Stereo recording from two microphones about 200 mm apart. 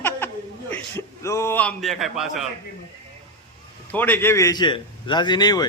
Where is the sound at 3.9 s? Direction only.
10° left (ahead or behind).